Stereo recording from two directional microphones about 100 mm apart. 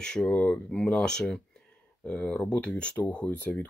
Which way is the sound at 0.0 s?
10° left (ahead or behind).